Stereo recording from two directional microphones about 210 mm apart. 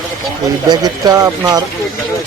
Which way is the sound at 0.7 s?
20° right (ahead or behind).